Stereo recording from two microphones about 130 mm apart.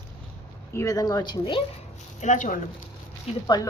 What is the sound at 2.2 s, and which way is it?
Speech, 75° left (ahead or behind).